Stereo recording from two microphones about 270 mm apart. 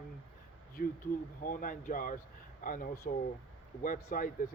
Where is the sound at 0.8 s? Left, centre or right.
Left.